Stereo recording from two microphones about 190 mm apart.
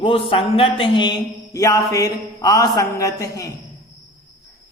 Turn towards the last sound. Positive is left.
turn(degrees=15)  # may be behind; listen again after turning